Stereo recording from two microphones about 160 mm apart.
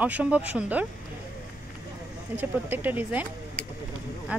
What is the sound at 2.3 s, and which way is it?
Speech, 10° right (ahead or behind).